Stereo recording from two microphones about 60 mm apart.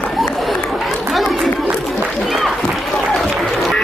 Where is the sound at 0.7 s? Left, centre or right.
Centre.